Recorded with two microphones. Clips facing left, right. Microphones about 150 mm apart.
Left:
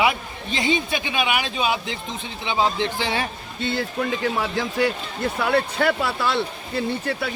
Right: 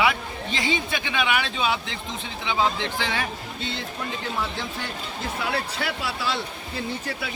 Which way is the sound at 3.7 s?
90° left.